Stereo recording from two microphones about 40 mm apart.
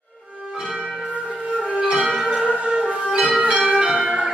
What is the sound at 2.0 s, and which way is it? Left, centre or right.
Music, centre.